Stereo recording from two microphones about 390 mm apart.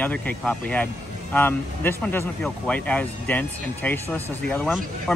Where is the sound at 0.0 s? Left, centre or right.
Centre.